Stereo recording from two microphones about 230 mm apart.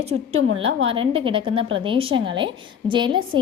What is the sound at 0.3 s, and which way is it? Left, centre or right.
Speech, right.